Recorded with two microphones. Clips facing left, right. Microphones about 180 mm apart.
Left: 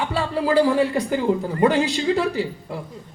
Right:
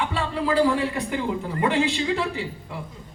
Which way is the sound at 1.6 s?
40° left (ahead or behind).